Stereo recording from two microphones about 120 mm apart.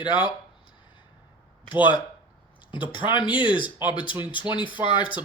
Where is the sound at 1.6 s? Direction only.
40° left (ahead or behind).